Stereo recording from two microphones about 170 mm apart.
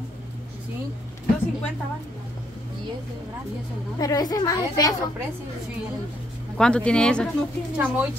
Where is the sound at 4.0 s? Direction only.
20° left (ahead or behind).